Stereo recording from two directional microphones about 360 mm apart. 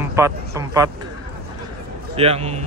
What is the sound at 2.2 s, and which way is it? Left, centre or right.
Speech, centre.